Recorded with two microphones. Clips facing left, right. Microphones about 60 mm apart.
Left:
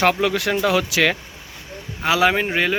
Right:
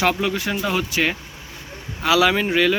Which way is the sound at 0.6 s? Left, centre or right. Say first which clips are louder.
Left 3 dB; left.